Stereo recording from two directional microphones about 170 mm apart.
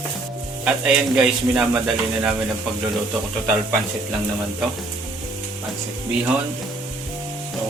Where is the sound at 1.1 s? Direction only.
5° right (ahead or behind).